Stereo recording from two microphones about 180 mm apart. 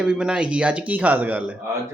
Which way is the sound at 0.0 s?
5° right (ahead or behind).